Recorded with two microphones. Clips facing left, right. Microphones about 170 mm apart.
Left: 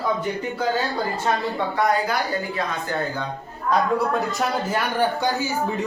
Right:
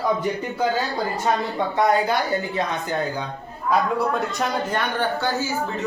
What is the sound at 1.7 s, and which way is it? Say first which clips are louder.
Speech: right 3 dB; 25° right (ahead or behind).